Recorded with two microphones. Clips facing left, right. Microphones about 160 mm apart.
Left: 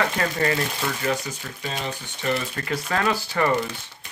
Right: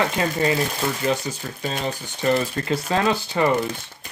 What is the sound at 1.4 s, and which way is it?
Speech, 35° right (ahead or behind).